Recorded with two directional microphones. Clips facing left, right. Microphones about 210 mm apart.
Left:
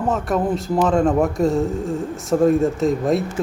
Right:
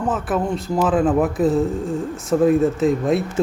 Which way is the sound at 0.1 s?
Centre (ahead or behind).